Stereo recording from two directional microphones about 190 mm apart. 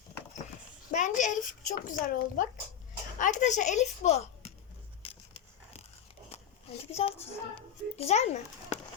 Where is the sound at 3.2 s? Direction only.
40° left (ahead or behind).